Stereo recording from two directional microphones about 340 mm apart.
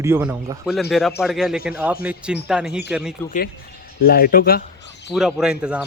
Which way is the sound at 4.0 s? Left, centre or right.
Left.